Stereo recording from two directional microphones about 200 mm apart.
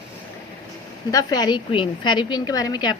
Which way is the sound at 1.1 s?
20° left (ahead or behind).